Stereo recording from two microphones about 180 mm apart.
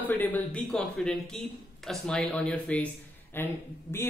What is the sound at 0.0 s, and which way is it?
A man's voice, 10° left (ahead or behind).